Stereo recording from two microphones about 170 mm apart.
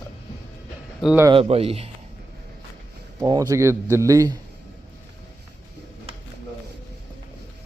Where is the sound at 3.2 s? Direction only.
20° right (ahead or behind).